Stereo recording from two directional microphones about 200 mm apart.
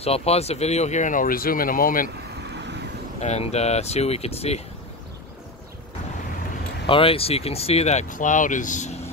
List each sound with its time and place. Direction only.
0.0 s speech: 30° left (ahead or behind)
2.0 s vehicle: 60° right (ahead or behind)
3.2 s speech: 35° left (ahead or behind)
6.9 s speech: 25° left (ahead or behind)